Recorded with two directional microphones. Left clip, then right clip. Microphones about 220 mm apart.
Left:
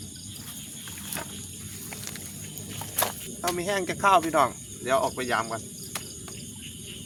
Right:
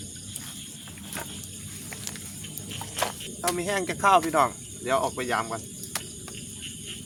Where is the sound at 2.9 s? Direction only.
25° left (ahead or behind).